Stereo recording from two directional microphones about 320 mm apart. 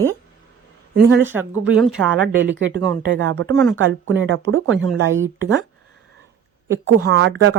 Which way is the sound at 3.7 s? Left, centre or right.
Right.